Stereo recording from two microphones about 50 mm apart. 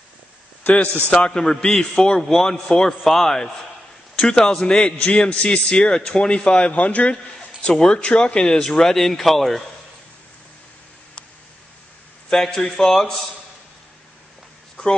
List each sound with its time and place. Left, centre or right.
1.1 s a man's voice: centre
12.3 s a man's voice: centre